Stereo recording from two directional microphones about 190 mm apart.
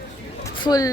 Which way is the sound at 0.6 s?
20° left (ahead or behind).